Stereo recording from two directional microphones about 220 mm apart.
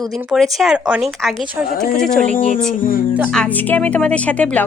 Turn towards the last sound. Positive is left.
turn(degrees=5)  # may be behind; listen again after turning